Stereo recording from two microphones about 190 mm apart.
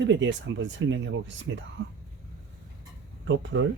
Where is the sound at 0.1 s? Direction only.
75° right (ahead or behind).